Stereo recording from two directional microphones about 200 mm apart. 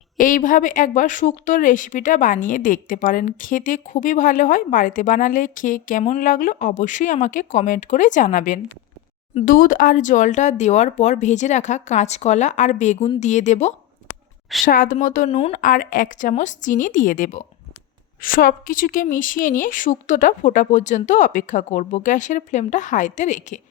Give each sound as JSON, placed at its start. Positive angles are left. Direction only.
{"t": 0.2, "sound": "a woman's voice", "side_deg": 40}